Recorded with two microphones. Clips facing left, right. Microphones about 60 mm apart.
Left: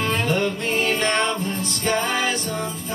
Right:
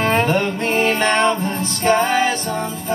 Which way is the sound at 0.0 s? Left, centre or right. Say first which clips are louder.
Right 5 dB; right.